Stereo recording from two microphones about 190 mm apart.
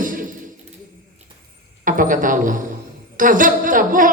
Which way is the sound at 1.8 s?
45° right (ahead or behind).